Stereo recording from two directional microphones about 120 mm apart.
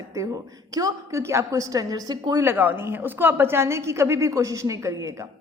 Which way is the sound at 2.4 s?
20° right (ahead or behind).